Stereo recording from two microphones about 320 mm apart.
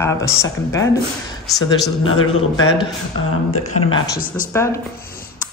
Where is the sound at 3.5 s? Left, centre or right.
Left.